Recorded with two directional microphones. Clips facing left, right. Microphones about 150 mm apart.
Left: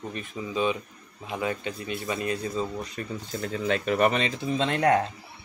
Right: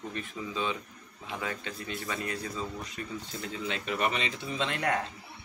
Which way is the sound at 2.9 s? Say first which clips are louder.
Left 5 dB; 50° left (ahead or behind).